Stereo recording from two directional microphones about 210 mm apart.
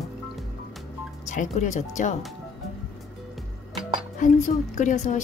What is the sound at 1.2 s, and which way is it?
Speech, 35° left (ahead or behind).